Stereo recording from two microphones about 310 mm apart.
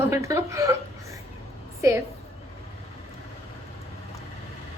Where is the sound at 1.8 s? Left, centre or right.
Centre.